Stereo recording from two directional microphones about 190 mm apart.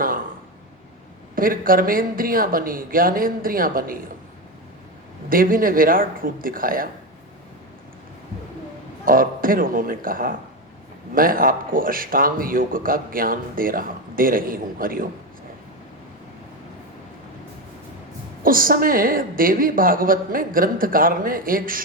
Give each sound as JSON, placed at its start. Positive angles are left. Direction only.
{"t": 1.4, "sound": "speech", "side_deg": -50}
{"t": 5.3, "sound": "speech", "side_deg": -50}
{"t": 9.0, "sound": "speech", "side_deg": -50}
{"t": 18.4, "sound": "speech", "side_deg": -50}